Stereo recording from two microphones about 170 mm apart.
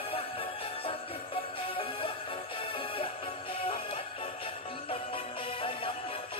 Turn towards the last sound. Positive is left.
turn(degrees=30)  # may be behind; listen again after turning